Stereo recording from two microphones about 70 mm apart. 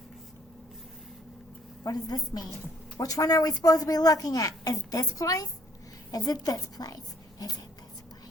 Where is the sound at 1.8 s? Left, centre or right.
Left.